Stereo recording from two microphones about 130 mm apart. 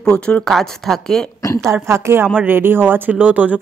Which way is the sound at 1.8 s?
20° right (ahead or behind).